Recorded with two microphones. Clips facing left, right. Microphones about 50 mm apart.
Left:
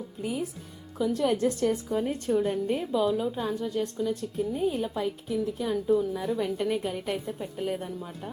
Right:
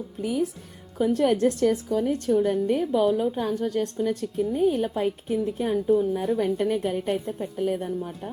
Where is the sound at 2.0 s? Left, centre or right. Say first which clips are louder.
Right 4 dB; right.